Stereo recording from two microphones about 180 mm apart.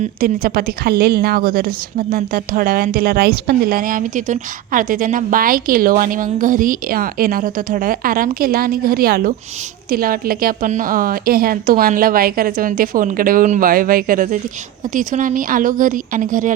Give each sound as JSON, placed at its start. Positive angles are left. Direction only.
{"t": 0.0, "sound": "a woman's voice", "side_deg": -55}